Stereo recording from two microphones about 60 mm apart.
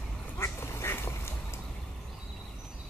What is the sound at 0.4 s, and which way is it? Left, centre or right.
Duck, left.